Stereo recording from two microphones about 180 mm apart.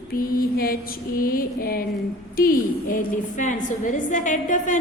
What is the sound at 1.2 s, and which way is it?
A woman's voice, 55° left (ahead or behind).